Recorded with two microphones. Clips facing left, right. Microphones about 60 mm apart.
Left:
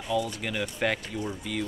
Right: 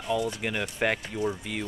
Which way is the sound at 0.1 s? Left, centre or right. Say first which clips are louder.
Right 1 dB; centre.